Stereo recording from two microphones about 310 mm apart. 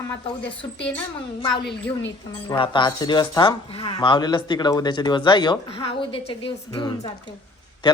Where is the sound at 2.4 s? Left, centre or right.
Centre.